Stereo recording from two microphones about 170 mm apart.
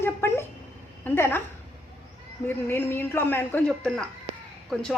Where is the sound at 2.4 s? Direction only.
15° left (ahead or behind).